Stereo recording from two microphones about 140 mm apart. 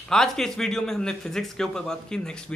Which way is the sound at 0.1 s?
5° left (ahead or behind).